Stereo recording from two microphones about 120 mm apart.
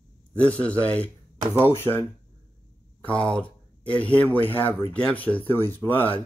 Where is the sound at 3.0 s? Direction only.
10° left (ahead or behind).